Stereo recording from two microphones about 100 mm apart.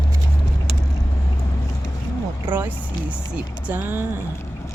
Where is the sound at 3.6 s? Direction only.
20° right (ahead or behind).